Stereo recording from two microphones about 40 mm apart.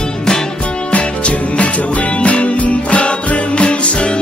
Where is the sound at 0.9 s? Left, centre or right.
Left.